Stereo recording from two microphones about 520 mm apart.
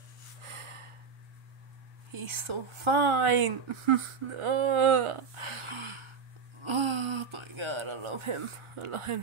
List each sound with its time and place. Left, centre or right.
0.4 s gasp: right
2.1 s speech: right
6.6 s a sound: right